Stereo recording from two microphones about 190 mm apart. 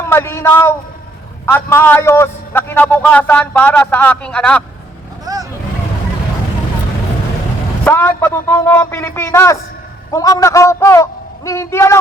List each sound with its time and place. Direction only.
0.1 s a man's voice: 15° left (ahead or behind)
5.2 s vehicle: 20° right (ahead or behind)
7.9 s a man's voice: 10° left (ahead or behind)